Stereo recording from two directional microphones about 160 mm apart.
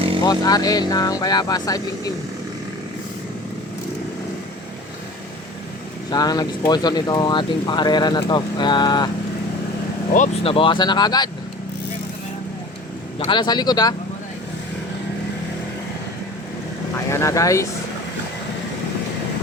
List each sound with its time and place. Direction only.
0.2 s speech: 25° left (ahead or behind)
6.1 s speech: 25° left (ahead or behind)
10.4 s speech: 35° left (ahead or behind)
13.1 s speech: 30° left (ahead or behind)
17.1 s speech: 20° left (ahead or behind)